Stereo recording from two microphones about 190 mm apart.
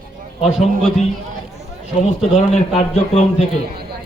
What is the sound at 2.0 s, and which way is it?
Speech, 40° left (ahead or behind).